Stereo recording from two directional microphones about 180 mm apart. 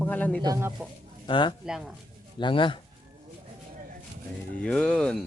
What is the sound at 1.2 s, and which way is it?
Speech, 25° left (ahead or behind).